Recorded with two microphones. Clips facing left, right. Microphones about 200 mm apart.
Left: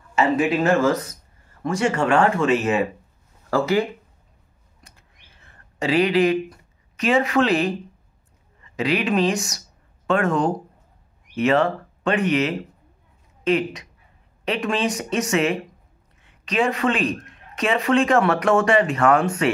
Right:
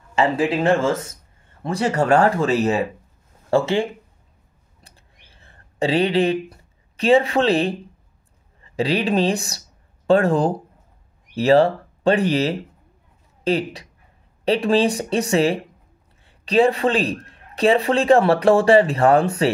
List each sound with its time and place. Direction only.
0.1 s speech: 30° right (ahead or behind)
4.8 s a sound: 30° right (ahead or behind)
8.5 s speech: 30° right (ahead or behind)